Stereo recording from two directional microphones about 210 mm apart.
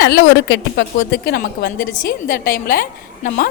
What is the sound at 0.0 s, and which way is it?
A woman's voice, 55° left (ahead or behind).